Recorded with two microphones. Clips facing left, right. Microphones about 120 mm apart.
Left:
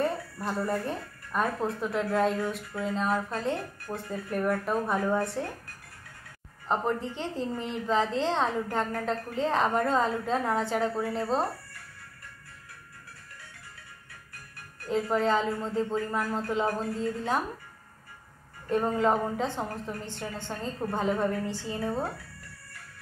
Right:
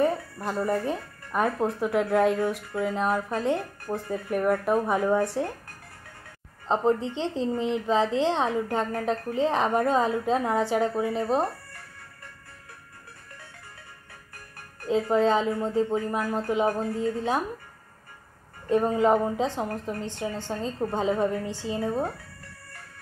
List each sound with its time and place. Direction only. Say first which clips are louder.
0.0 s a woman's voice: right 4 dB; 15° right (ahead or behind)
6.7 s a woman's voice: right 5 dB; 20° right (ahead or behind)
14.9 s a woman's voice: right 4 dB; 20° right (ahead or behind)
18.7 s a woman's voice: right 4 dB; 15° right (ahead or behind)